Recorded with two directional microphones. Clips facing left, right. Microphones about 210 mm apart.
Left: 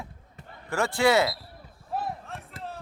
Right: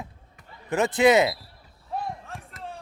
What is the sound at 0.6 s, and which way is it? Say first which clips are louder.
Speech: right 4 dB; 20° right (ahead or behind).